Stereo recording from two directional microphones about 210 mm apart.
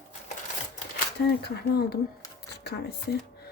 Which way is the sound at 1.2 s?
50° left (ahead or behind).